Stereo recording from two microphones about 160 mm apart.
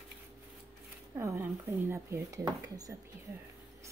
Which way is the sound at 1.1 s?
15° right (ahead or behind).